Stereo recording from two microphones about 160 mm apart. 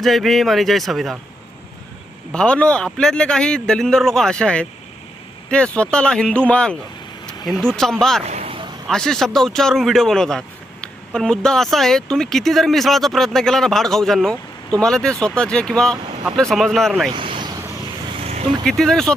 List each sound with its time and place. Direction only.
0.0 s speech: centre (ahead or behind)
2.3 s speech: 5° left (ahead or behind)
8.3 s vehicle: 40° right (ahead or behind)
8.9 s speech: 5° left (ahead or behind)
17.1 s vehicle: 30° right (ahead or behind)
18.6 s speech: 5° left (ahead or behind)